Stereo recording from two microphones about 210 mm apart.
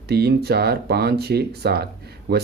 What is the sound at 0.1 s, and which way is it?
Speech, 50° right (ahead or behind).